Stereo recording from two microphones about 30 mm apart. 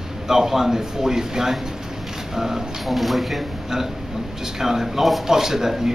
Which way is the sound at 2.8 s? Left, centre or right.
Centre.